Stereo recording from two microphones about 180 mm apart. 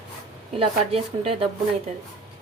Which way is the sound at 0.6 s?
30° right (ahead or behind).